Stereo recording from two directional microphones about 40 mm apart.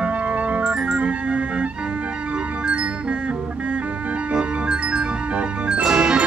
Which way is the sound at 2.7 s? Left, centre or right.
Right.